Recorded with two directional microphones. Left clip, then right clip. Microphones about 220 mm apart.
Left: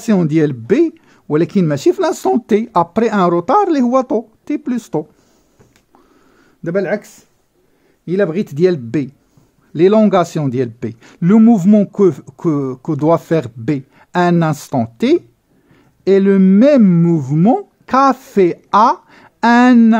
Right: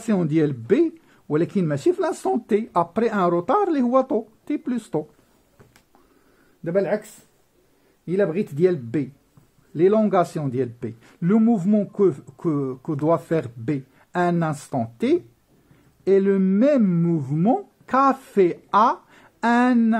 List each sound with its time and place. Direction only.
0.0 s speech: 25° left (ahead or behind)
6.6 s a man's voice: 35° left (ahead or behind)